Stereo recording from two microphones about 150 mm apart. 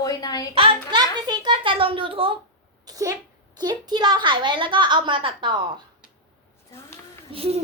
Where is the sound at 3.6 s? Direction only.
30° right (ahead or behind).